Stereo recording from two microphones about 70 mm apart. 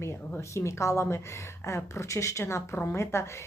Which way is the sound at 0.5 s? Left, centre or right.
Left.